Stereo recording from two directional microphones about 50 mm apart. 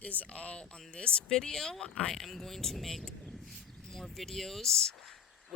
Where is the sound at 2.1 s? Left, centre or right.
Centre.